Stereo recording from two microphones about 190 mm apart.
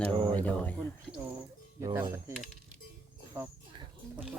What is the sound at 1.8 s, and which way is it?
Speech, 15° right (ahead or behind).